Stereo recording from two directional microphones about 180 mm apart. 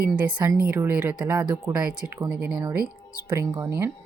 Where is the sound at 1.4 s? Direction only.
20° right (ahead or behind).